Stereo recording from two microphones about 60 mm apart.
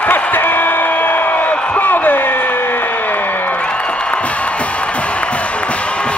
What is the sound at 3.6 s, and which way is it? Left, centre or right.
Music, centre.